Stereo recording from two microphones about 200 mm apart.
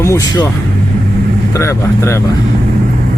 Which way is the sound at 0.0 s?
15° left (ahead or behind).